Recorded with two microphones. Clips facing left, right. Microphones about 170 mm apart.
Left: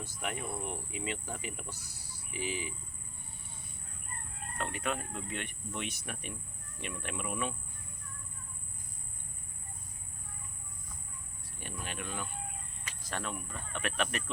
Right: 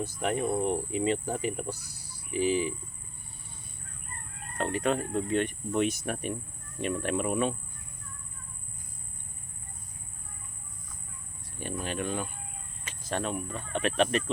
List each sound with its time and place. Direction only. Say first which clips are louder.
0.0 s speech: right 10 dB; 35° right (ahead or behind)
4.5 s speech: right 8 dB; 35° right (ahead or behind)
11.6 s speech: right 9 dB; 35° right (ahead or behind)
12.8 s speech: right 8 dB; 25° right (ahead or behind)